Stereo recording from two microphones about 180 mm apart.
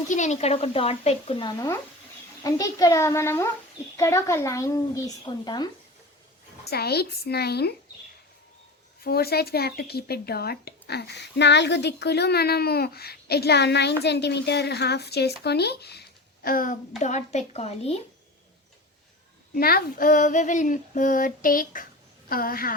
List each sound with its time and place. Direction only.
0.1 s a child's voice: 40° left (ahead or behind); by 5.7 s 25° left (ahead or behind)
6.7 s speech: 60° left (ahead or behind)
9.0 s speech: 60° left (ahead or behind)
17.0 s speech: 40° left (ahead or behind)
19.5 s female singing: 55° left (ahead or behind)